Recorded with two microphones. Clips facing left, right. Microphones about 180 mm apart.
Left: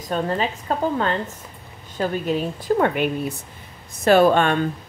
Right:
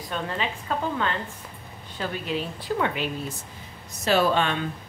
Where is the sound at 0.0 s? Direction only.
40° left (ahead or behind).